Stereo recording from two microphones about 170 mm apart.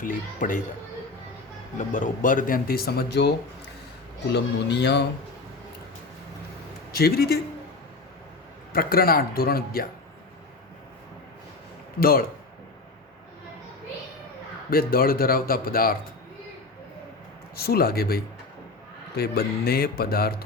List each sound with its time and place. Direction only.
0.0 s speech: 50° left (ahead or behind)
1.9 s speech: 50° left (ahead or behind); by 5.0 s 80° left
6.9 s speech: 65° left (ahead or behind)
8.7 s speech: 60° left (ahead or behind)
11.9 s speech: 60° left (ahead or behind)
14.7 s speech: 60° left (ahead or behind)
17.6 s speech: 65° left (ahead or behind)